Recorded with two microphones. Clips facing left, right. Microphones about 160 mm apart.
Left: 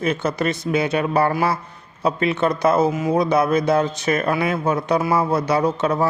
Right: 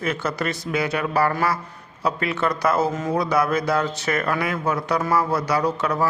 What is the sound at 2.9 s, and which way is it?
Speech, 10° left (ahead or behind).